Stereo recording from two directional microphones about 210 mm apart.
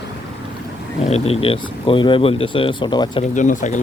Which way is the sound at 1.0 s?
30° left (ahead or behind).